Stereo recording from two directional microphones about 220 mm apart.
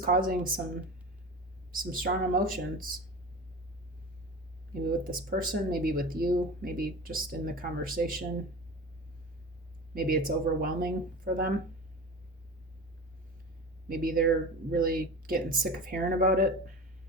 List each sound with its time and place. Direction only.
0.0 s speech: 40° right (ahead or behind)
1.7 s speech: 40° right (ahead or behind)
4.9 s speech: 40° right (ahead or behind)
9.9 s speech: 40° right (ahead or behind)
13.8 s speech: 40° right (ahead or behind)